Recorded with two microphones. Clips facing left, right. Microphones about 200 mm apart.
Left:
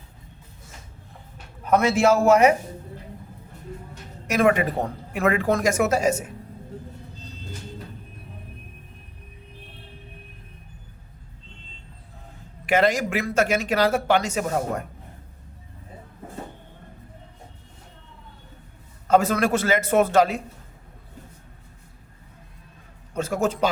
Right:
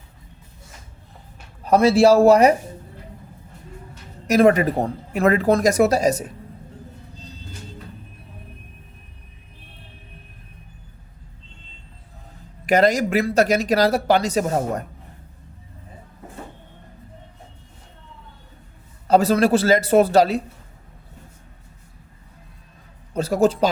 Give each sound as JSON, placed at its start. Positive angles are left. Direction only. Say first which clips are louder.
{"t": 1.6, "sound": "speech", "louder": "right 5 dB", "side_deg": -35}
{"t": 4.3, "sound": "speech", "louder": "right 5 dB", "side_deg": -40}
{"t": 12.6, "sound": "speech", "louder": "right 3 dB", "side_deg": -40}
{"t": 19.0, "sound": "speech", "louder": "right 4 dB", "side_deg": -35}
{"t": 23.1, "sound": "speech", "louder": "right 6 dB", "side_deg": -35}